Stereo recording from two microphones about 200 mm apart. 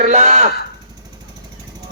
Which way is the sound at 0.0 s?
35° right (ahead or behind).